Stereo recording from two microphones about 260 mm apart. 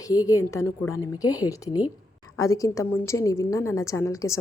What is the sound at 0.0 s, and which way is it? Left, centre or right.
A woman's voice, centre.